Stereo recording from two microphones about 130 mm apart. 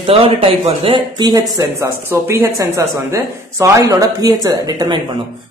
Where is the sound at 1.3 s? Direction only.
25° right (ahead or behind).